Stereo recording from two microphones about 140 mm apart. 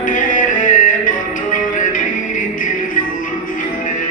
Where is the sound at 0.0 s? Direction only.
70° left (ahead or behind).